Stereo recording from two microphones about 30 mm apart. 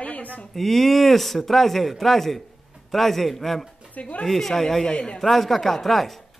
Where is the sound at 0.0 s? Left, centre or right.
Left.